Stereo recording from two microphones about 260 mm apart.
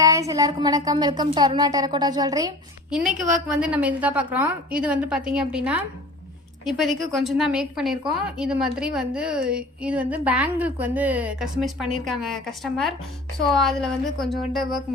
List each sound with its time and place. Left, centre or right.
0.0 s a woman's voice: centre